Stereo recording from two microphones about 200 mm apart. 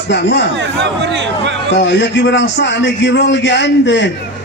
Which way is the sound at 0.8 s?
60° right (ahead or behind).